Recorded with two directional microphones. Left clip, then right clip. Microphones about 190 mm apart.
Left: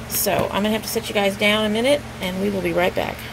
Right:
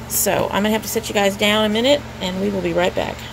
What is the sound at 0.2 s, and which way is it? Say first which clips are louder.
A woman's voice: right 2 dB; 15° right (ahead or behind).